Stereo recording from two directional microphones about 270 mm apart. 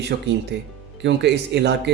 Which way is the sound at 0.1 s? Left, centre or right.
Right.